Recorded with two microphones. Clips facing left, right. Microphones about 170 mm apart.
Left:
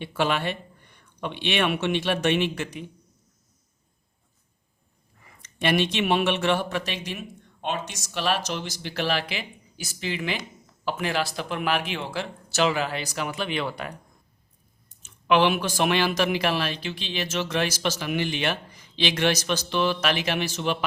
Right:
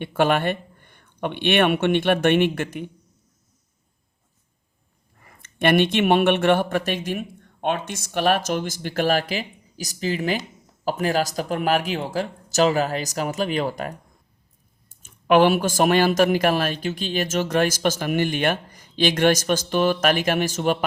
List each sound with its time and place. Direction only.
0.0 s speech: 50° right (ahead or behind)
5.2 s speech: 50° right (ahead or behind)